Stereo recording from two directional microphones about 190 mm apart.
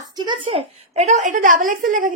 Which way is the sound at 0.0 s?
20° right (ahead or behind).